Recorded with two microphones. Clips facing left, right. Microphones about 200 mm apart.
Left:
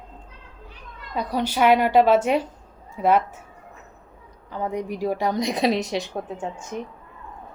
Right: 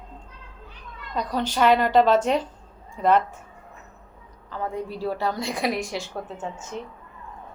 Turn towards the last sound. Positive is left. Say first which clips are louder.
# left 2 dB
turn(degrees=15)  # may be behind; listen again after turning